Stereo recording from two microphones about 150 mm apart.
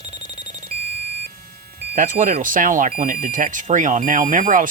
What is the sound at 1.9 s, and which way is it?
Speech, 60° right (ahead or behind).